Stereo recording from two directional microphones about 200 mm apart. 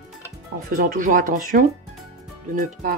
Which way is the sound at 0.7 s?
40° right (ahead or behind).